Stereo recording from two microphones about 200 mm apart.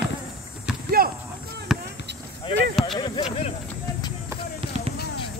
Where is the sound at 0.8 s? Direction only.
45° right (ahead or behind).